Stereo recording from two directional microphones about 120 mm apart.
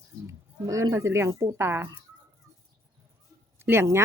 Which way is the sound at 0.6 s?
30° right (ahead or behind).